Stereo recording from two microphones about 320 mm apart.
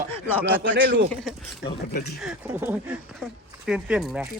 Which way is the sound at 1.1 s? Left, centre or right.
Centre.